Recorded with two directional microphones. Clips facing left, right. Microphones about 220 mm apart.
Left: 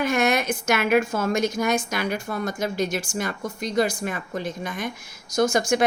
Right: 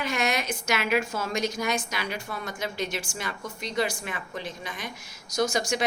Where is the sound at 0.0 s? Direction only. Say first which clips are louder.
Left 6 dB; 50° left (ahead or behind).